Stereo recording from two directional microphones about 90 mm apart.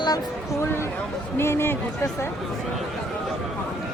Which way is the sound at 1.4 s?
25° left (ahead or behind).